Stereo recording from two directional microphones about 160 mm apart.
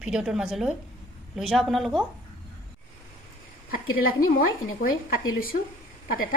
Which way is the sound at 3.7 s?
65° left (ahead or behind).